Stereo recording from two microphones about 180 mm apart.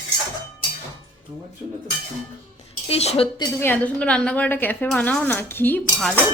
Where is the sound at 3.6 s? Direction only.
10° left (ahead or behind).